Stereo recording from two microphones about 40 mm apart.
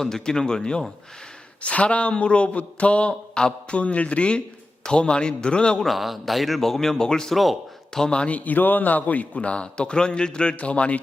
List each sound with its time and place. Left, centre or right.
0.0 s speech: centre
1.6 s speech: left
5.8 s speech: centre
7.3 s speech: centre
8.1 s a man's voice: left